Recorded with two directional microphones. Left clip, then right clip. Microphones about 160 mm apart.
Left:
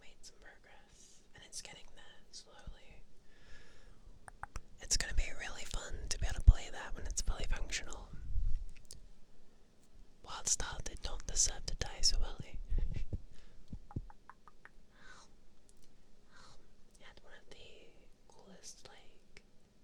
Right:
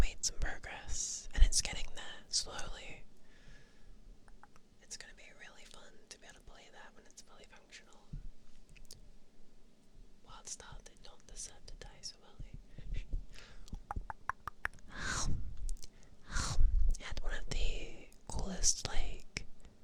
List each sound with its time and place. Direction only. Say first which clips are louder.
0.0 s whispering: right 18 dB; 25° right (ahead or behind)
2.4 s whispering: right 14 dB; 30° right (ahead or behind)
3.4 s a sound: left 3 dB; 10° left (ahead or behind)
4.3 s whispering: left 13 dB; 35° left (ahead or behind)
10.2 s speech: left 12 dB; 30° left (ahead or behind)
13.8 s a sound: right 14 dB; 35° right (ahead or behind)
16.9 s whispering: right 12 dB; 20° right (ahead or behind)